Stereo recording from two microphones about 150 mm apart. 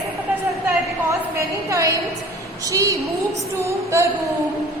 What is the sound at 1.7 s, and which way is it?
A woman's voice, 20° right (ahead or behind).